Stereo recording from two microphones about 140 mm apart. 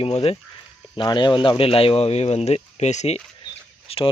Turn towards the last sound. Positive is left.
turn(degrees=40)  # may be behind; listen again after turning